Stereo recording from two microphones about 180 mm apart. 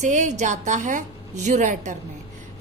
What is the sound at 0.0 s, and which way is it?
A woman's voice, 40° right (ahead or behind).